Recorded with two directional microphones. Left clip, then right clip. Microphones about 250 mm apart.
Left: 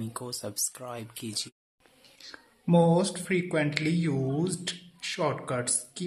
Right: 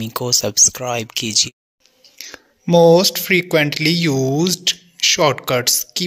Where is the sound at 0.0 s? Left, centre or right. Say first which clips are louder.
Right 18 dB; right.